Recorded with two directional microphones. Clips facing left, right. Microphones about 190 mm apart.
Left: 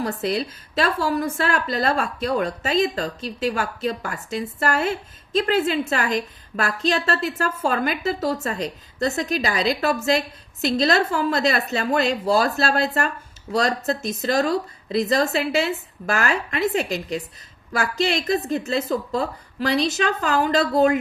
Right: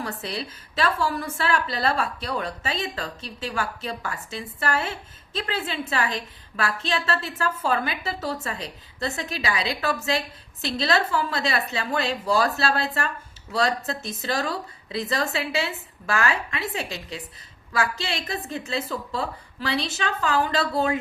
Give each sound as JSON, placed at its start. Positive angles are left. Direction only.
{"t": 0.0, "sound": "a woman's voice", "side_deg": 40}